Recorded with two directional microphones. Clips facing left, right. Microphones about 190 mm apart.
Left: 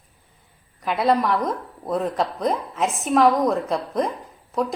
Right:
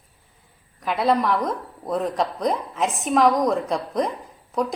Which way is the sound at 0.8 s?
Centre (ahead or behind).